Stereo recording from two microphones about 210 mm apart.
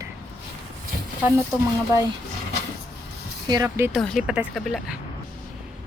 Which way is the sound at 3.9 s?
Centre (ahead or behind).